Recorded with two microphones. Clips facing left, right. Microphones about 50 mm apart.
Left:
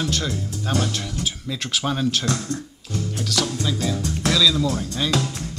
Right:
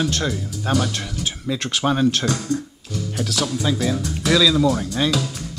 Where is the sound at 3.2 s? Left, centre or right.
Centre.